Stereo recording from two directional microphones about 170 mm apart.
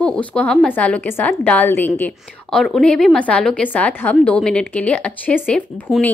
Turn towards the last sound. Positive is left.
turn(degrees=10)  # may be behind; listen again after turning